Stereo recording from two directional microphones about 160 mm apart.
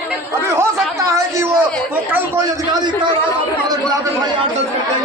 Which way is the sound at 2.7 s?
30° right (ahead or behind).